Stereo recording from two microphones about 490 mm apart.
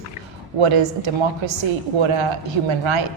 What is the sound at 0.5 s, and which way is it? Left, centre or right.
A woman's voice, right.